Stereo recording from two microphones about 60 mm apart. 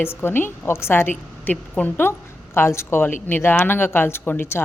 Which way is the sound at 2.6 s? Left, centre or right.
Left.